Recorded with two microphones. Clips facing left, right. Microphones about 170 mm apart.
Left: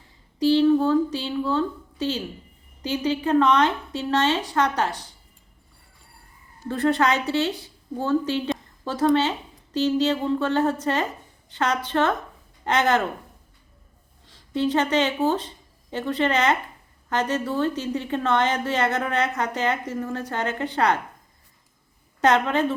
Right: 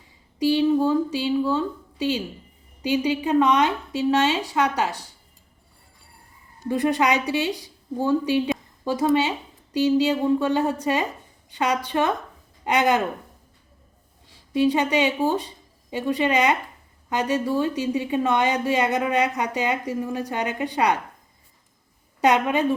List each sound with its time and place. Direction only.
0.3 s a woman's voice: 10° right (ahead or behind)
6.6 s a woman's voice: 15° right (ahead or behind)
14.3 s a woman's voice: 10° right (ahead or behind)
22.2 s a woman's voice: 10° right (ahead or behind)